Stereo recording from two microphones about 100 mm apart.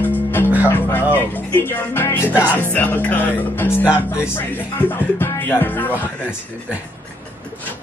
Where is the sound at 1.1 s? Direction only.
20° left (ahead or behind).